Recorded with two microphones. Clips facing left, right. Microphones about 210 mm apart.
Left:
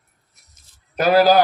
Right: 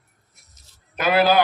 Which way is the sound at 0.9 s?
40° left (ahead or behind).